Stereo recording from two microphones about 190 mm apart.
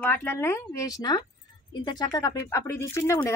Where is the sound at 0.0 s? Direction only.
10° left (ahead or behind).